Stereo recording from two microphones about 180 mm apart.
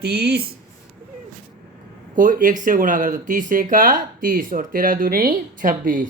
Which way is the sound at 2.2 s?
45° right (ahead or behind).